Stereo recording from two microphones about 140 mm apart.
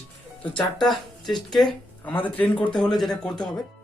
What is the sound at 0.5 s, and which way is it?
Speech, centre (ahead or behind).